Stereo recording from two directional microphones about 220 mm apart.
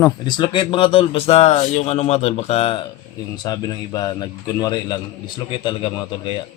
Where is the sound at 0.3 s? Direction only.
20° left (ahead or behind).